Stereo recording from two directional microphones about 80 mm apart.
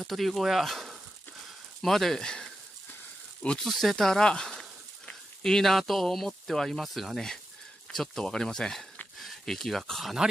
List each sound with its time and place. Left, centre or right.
0.0 s speech: centre
3.6 s speech: centre